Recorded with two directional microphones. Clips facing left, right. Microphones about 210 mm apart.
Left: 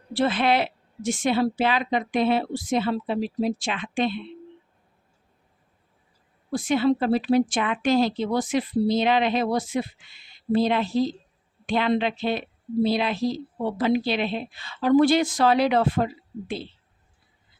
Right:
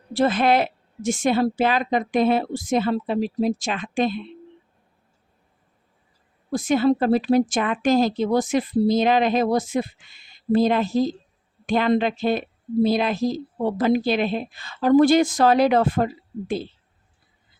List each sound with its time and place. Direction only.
0.1 s a woman's voice: 45° right (ahead or behind)
6.5 s a woman's voice: 45° right (ahead or behind)